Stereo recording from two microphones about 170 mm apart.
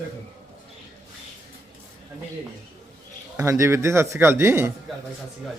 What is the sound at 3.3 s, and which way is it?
A man's voice, 15° right (ahead or behind).